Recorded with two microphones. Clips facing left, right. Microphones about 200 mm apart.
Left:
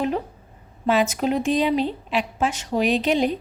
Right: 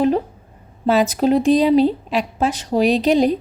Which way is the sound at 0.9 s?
35° right (ahead or behind).